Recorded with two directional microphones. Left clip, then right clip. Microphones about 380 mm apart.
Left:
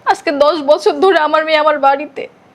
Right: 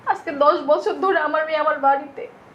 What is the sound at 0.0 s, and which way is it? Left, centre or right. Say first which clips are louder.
A woman's voice: left 6 dB; left.